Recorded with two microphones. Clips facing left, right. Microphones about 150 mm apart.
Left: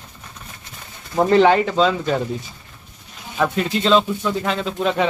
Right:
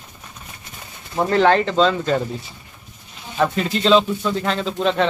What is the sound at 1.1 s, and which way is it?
Speech, 25° left (ahead or behind).